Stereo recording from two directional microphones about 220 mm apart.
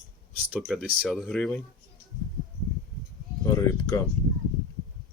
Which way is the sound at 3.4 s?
15° left (ahead or behind).